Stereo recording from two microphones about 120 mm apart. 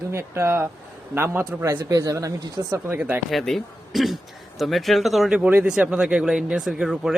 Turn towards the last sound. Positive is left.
turn(degrees=-5)  # may be behind; listen again after turning